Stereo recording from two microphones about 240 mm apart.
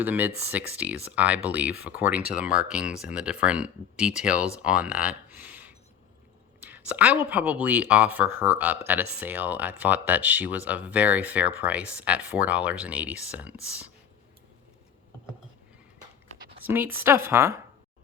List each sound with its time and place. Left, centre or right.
0.0 s speech: centre
16.4 s a sound: right
16.6 s speech: centre